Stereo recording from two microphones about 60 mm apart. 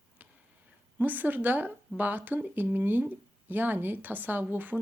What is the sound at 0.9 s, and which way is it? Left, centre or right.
Speech, right.